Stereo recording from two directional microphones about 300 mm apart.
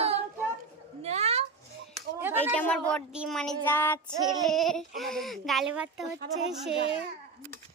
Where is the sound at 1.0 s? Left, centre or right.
Right.